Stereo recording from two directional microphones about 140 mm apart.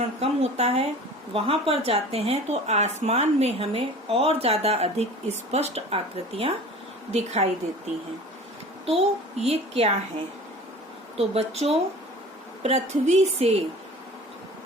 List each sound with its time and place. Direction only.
0.2 s speech: 45° right (ahead or behind)
8.9 s speech: 50° right (ahead or behind)
11.2 s speech: 50° right (ahead or behind)